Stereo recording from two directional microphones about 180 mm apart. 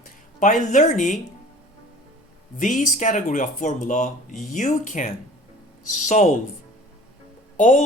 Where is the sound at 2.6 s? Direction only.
45° left (ahead or behind).